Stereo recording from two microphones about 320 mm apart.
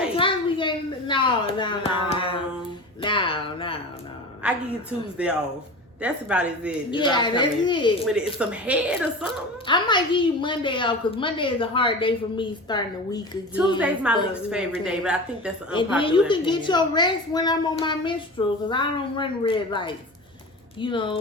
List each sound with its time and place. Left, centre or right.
0.2 s a sound: centre
4.4 s a woman's voice: centre
6.9 s a woman's voice: centre
8.4 s a woman's voice: centre
9.6 s a woman's voice: centre
13.7 s a woman's voice: centre
16.0 s a woman's voice: centre